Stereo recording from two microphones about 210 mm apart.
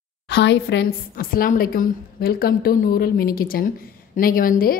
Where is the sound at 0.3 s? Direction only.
55° left (ahead or behind).